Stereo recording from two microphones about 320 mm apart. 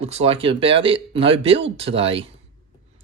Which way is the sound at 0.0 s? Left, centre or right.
Centre.